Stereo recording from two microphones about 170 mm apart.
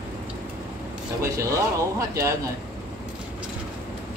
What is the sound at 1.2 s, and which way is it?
Speech, 20° right (ahead or behind).